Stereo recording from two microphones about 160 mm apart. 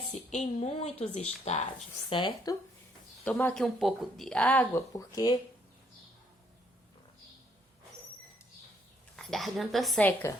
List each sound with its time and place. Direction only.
0.1 s a woman's voice: 45° left (ahead or behind)
2.0 s speech: 30° left (ahead or behind)
3.2 s speech: 10° left (ahead or behind)
4.9 s speech: 20° left (ahead or behind)
9.1 s speech: centre (ahead or behind)
10.1 s speech: 10° left (ahead or behind)